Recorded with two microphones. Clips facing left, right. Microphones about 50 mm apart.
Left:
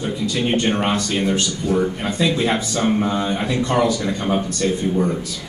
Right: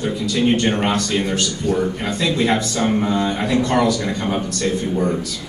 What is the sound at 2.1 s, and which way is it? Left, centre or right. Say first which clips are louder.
Speech: even; left.